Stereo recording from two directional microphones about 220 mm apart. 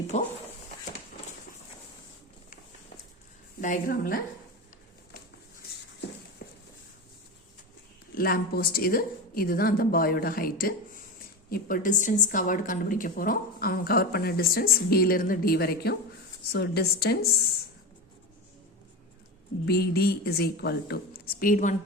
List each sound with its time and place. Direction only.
0.1 s a woman's voice: 30° left (ahead or behind)
3.6 s a woman's voice: 40° left (ahead or behind)
6.4 s a sound: 45° left (ahead or behind)
8.1 s a woman's voice: 45° left (ahead or behind)
19.6 s a woman's voice: 45° left (ahead or behind)